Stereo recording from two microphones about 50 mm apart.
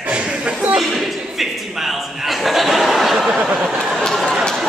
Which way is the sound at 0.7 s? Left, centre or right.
Centre.